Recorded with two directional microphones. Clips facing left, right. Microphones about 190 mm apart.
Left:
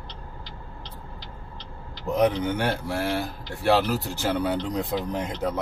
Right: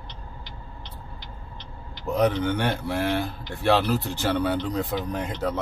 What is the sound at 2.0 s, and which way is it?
Speech, 20° left (ahead or behind).